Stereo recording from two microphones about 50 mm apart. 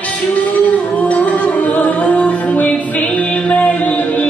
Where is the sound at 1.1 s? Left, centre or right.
Left.